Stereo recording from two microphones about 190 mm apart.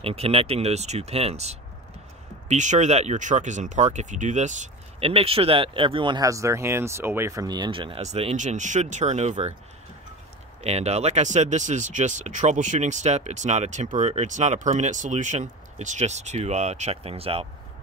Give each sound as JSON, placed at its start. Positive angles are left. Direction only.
{"t": 0.0, "sound": "speech", "side_deg": -30}
{"t": 10.6, "sound": "speech", "side_deg": -35}